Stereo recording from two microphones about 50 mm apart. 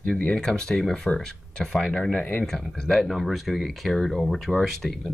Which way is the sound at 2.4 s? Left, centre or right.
Centre.